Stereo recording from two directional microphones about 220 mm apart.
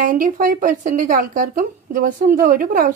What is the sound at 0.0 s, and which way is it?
Speech, 40° right (ahead or behind).